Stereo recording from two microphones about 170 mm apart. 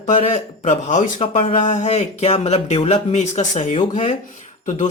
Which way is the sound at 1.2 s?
35° left (ahead or behind).